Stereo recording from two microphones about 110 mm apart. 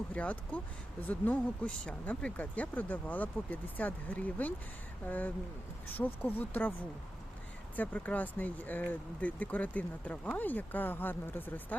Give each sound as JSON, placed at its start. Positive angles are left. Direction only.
{"t": 0.1, "sound": "speech", "side_deg": 15}
{"t": 7.8, "sound": "speech", "side_deg": 15}